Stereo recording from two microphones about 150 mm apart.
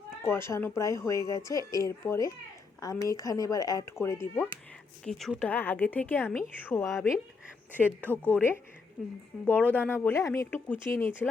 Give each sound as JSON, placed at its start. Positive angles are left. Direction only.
{"t": 0.3, "sound": "speech", "side_deg": 15}
{"t": 5.0, "sound": "speech", "side_deg": 0}
{"t": 8.0, "sound": "speech", "side_deg": 10}